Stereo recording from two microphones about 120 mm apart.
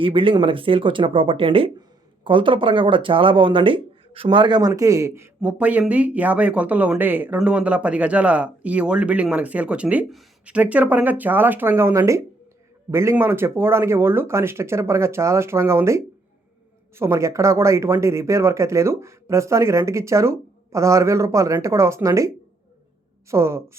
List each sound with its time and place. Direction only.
0.0 s speech: 45° right (ahead or behind)
4.7 s speech: 25° right (ahead or behind)
5.4 s speech: 10° right (ahead or behind)
23.3 s speech: 25° right (ahead or behind)